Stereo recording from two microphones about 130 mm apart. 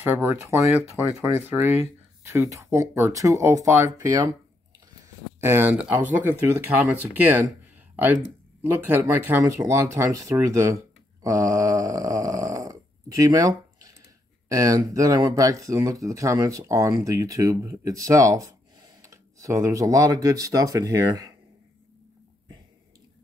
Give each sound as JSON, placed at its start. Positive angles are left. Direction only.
{"t": 0.0, "sound": "speech", "side_deg": -15}
{"t": 5.4, "sound": "speech", "side_deg": -15}
{"t": 11.2, "sound": "snoring", "side_deg": -25}
{"t": 14.5, "sound": "speech", "side_deg": -25}